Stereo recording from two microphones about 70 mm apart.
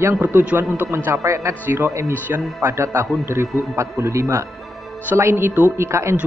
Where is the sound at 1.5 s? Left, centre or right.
Right.